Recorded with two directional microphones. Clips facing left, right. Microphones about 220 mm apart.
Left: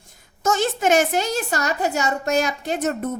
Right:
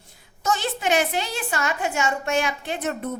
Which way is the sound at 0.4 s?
45° left (ahead or behind).